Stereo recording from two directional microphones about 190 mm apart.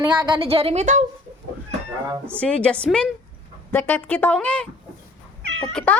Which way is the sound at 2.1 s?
10° right (ahead or behind).